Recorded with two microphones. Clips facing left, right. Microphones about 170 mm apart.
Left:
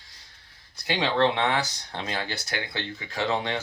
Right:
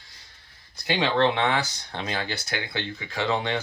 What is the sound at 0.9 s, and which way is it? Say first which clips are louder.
Speech: right 1 dB; 30° left (ahead or behind).